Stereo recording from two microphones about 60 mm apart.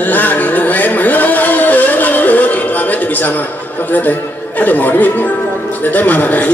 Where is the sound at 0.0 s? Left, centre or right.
Left.